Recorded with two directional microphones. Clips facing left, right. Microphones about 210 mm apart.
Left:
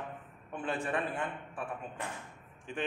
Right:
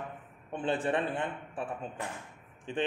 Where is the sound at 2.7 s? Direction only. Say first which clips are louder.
Right 5 dB; 30° right (ahead or behind).